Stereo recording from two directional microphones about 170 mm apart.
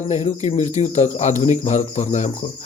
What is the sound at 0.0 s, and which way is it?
Speech, 40° left (ahead or behind).